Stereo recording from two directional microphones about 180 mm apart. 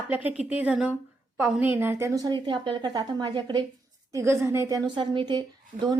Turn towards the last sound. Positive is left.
turn(degrees=-20)  # may be behind; listen again after turning